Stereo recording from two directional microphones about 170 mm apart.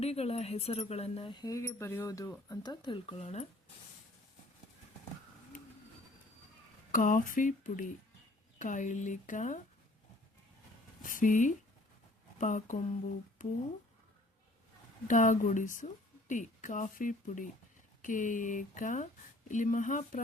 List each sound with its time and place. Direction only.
0.0 s speech: 35° left (ahead or behind)
6.9 s a woman's voice: 50° left (ahead or behind)
11.0 s a woman's voice: 50° left (ahead or behind)
15.0 s a woman's voice: 50° left (ahead or behind)